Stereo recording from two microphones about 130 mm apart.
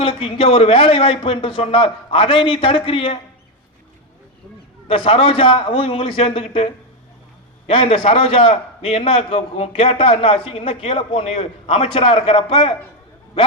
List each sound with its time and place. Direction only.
0.0 s a man's voice: 45° left (ahead or behind)
4.9 s a man's voice: 45° left (ahead or behind)